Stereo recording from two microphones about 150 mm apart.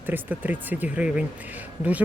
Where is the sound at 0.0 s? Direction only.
15° right (ahead or behind).